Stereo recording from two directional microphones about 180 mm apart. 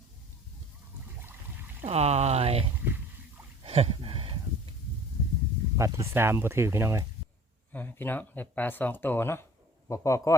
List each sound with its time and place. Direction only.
1.8 s speech: 35° right (ahead or behind)
3.6 s a sound: 35° right (ahead or behind)
5.7 s speech: 15° right (ahead or behind)
7.7 s a man's voice: 10° left (ahead or behind)